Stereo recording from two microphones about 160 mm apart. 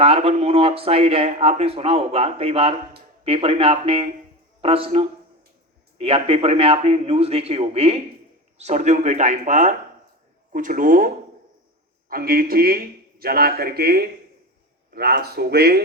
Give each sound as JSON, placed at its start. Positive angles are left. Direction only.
{"t": 0.0, "sound": "a man's voice", "side_deg": -40}